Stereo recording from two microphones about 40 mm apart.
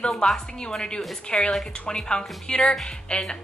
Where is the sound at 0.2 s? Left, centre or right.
Left.